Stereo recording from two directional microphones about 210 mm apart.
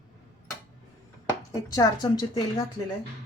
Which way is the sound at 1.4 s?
15° left (ahead or behind).